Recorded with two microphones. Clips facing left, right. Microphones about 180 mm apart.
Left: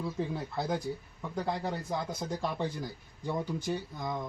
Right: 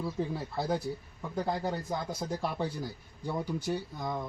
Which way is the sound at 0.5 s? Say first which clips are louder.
Right 2 dB; 5° right (ahead or behind).